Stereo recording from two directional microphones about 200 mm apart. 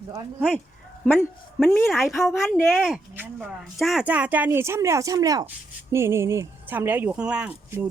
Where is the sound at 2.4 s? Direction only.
10° left (ahead or behind).